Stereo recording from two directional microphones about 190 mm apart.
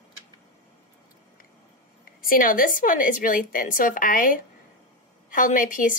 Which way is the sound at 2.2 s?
50° left (ahead or behind).